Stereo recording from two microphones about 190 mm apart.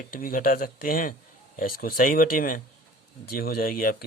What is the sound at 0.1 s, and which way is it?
Speech, 50° left (ahead or behind).